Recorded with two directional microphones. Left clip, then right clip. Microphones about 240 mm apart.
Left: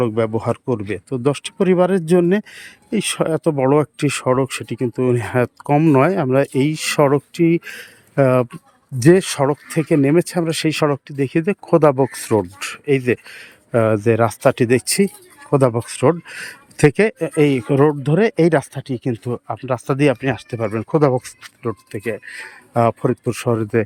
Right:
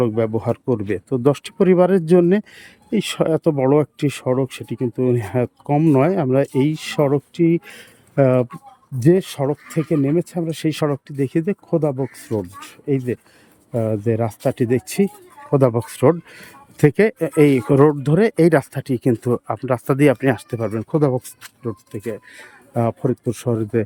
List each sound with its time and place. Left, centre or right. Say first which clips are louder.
0.0 s speech: left 1 dB; centre
11.9 s speech: left 7 dB; left
12.5 s speech: left 4 dB; centre